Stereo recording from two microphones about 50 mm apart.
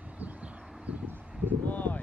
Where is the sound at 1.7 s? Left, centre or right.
Left.